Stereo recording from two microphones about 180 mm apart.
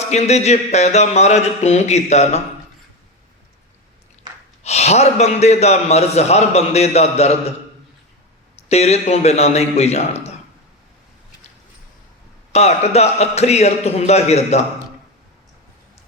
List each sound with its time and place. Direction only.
0.0 s a man's voice: 40° left (ahead or behind)
4.3 s gasp: 25° right (ahead or behind)
4.6 s a man's voice: 35° left (ahead or behind)
8.7 s a man's voice: 35° left (ahead or behind)
12.5 s a man's voice: 35° left (ahead or behind)